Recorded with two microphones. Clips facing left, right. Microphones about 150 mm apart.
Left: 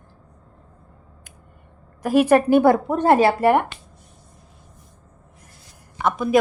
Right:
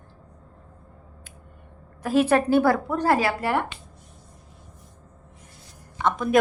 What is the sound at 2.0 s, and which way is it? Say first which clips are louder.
A woman's voice: left 4 dB; 10° left (ahead or behind).